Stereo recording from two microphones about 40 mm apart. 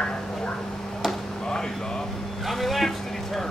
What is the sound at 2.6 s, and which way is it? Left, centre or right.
Vehicle, centre.